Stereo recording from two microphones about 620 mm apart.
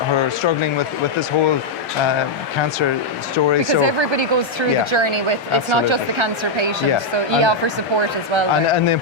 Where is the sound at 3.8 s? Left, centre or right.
Right.